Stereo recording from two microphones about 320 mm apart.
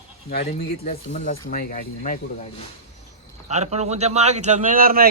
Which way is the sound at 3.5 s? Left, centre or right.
Right.